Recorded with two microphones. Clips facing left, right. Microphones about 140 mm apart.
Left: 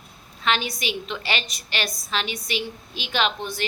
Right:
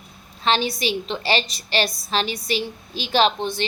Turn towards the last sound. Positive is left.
turn(degrees=-25)  # may be behind; listen again after turning